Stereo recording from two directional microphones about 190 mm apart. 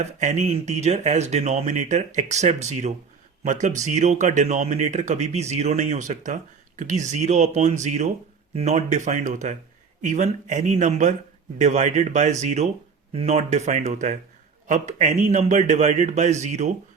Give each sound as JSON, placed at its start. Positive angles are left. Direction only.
{"t": 0.0, "sound": "speech", "side_deg": -40}